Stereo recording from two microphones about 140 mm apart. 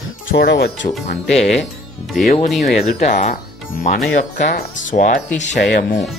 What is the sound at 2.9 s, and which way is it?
Speech, 50° left (ahead or behind).